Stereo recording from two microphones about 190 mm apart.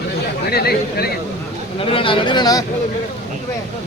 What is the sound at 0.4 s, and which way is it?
Speech, 55° left (ahead or behind).